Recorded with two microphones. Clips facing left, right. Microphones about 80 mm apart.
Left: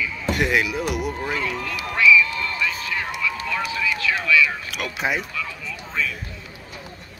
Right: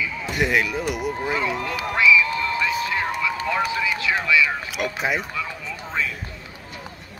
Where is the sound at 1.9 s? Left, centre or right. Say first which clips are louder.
Left 1 dB; centre.